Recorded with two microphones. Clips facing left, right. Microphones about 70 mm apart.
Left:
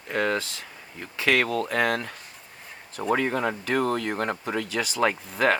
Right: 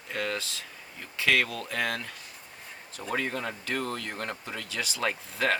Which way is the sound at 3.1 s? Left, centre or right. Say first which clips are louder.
Left 4 dB; left.